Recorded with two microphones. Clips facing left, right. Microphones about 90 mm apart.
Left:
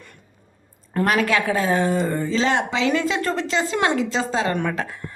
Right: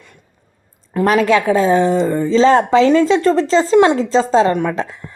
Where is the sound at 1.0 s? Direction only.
30° right (ahead or behind).